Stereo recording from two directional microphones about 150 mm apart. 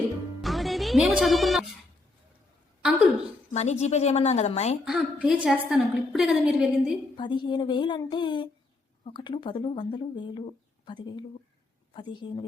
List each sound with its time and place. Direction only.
0.4 s speech: centre (ahead or behind)
3.5 s a woman's voice: 45° left (ahead or behind)
4.9 s a woman's voice: 5° right (ahead or behind)
7.2 s speech: 30° left (ahead or behind)